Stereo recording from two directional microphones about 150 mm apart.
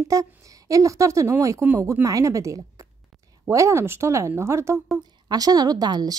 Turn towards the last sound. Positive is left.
turn(degrees=-25)  # may be behind; listen again after turning